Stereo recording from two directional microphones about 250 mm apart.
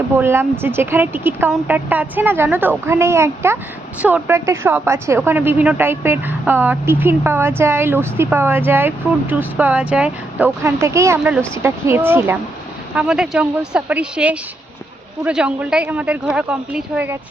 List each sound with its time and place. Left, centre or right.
0.2 s a woman's voice: centre